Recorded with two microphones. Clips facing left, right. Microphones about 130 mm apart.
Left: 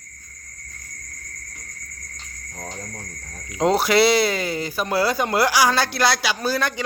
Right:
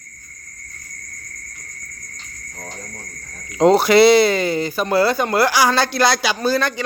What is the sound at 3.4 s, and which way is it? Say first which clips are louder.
Speech: right 6 dB; centre (ahead or behind).